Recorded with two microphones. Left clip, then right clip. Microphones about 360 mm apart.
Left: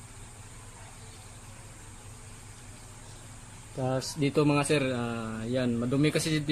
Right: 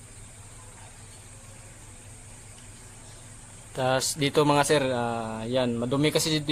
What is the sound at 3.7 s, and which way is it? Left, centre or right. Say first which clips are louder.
Speech: right 7 dB; right.